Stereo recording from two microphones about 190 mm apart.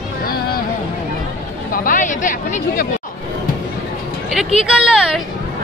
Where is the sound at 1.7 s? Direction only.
45° left (ahead or behind).